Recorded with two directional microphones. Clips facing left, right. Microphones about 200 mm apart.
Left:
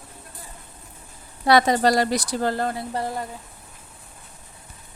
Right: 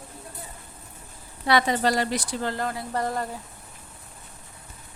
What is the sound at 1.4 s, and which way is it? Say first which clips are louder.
A woman's voice: left 4 dB; 40° left (ahead or behind).